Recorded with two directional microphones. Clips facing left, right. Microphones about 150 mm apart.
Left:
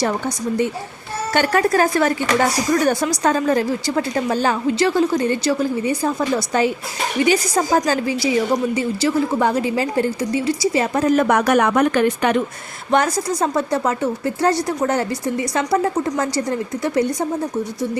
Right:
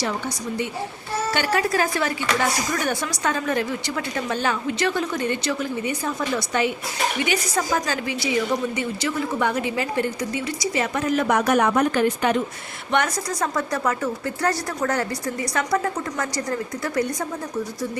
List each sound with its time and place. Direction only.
1.3 s speech: 50° left (ahead or behind)
11.3 s speech: 70° left (ahead or behind)
12.9 s a woman's voice: 35° left (ahead or behind)